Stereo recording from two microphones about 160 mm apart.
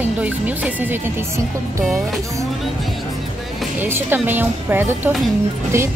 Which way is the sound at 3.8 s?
15° right (ahead or behind).